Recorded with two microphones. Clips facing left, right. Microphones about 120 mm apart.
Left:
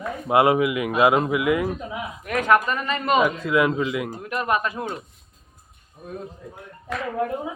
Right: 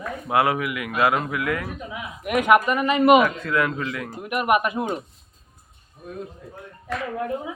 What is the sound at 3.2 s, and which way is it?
Speech, 10° left (ahead or behind).